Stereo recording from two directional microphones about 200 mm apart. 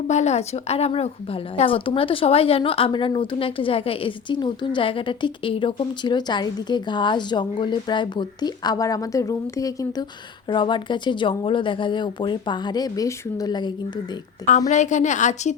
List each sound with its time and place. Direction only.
0.1 s a woman's voice: 35° left (ahead or behind)
14.7 s a woman's voice: 35° left (ahead or behind)